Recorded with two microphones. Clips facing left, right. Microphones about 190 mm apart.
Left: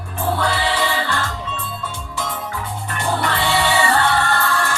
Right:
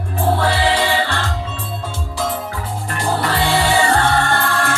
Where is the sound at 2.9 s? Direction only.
35° right (ahead or behind); by 4.8 s 55° right (ahead or behind).